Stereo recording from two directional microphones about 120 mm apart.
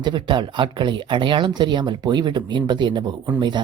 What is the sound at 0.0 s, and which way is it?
Speech, 40° right (ahead or behind).